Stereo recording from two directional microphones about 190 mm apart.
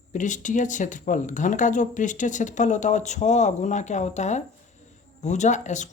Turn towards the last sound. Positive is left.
turn(degrees=40)  # may be behind; listen again after turning